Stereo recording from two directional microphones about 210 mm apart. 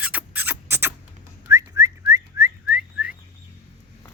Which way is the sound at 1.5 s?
15° right (ahead or behind).